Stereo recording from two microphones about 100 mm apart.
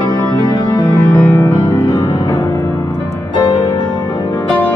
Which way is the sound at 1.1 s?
20° left (ahead or behind).